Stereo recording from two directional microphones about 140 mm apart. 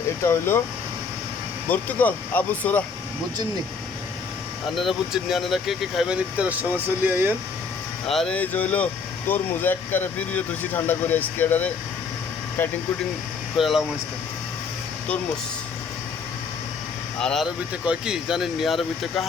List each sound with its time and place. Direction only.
0.2 s speech: 20° left (ahead or behind)
1.7 s speech: 10° left (ahead or behind)
4.6 s speech: centre (ahead or behind)
8.0 s speech: centre (ahead or behind)
13.6 s speech: centre (ahead or behind)
17.2 s speech: 5° left (ahead or behind)